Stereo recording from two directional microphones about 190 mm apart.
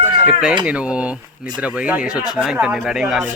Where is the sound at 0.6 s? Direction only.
5° right (ahead or behind).